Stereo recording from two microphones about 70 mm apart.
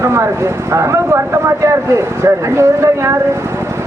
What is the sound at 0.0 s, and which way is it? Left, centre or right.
Speech, right.